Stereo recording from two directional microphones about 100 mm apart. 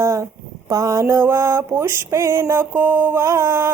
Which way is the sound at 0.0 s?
30° right (ahead or behind).